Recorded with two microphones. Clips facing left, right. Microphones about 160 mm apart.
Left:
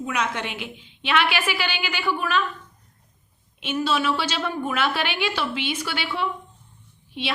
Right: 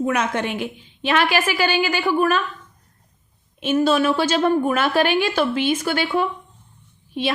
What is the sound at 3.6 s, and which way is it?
A woman's voice, 45° right (ahead or behind).